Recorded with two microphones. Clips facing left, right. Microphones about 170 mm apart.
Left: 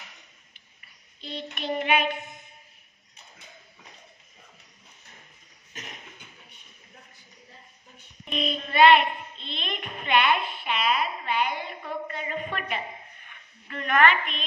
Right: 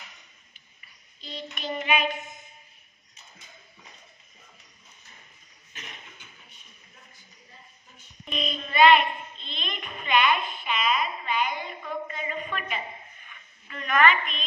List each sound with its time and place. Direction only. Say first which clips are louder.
0.7 s child singing: left 4 dB; 60° left (ahead or behind)
5.7 s a sound: left 3 dB; 40° left (ahead or behind)
8.0 s child singing: left 3 dB; 55° left (ahead or behind)
9.5 s music: left 3 dB; 55° left (ahead or behind)
12.1 s a sound: left 1 dB; 50° left (ahead or behind)
13.7 s a woman's voice: left 1 dB; 55° left (ahead or behind)